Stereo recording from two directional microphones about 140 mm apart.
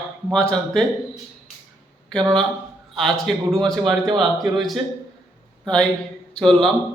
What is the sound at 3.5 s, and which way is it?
Speech, centre (ahead or behind).